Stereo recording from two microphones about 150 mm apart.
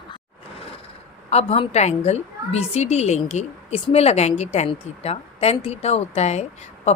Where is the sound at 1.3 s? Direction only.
45° left (ahead or behind).